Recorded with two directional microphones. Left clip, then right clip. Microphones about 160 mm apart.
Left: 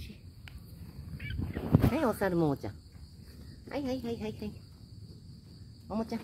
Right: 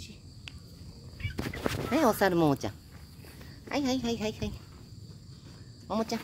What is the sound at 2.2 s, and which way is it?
Speech, 45° right (ahead or behind).